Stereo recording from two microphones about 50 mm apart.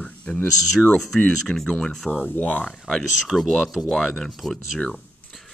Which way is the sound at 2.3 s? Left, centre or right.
Left.